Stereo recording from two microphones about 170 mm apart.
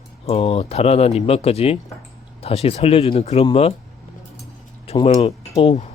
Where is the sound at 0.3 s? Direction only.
35° left (ahead or behind).